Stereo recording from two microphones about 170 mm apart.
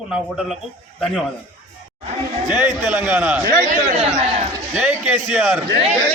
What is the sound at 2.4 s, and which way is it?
A man's voice, 10° right (ahead or behind).